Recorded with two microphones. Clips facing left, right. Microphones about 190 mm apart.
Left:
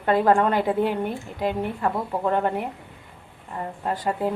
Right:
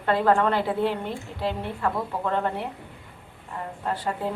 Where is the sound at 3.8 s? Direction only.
15° left (ahead or behind).